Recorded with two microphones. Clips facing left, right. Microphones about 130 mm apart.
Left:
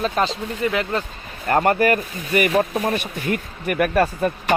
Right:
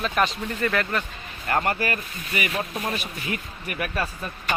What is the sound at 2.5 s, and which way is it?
Speech, 30° left (ahead or behind).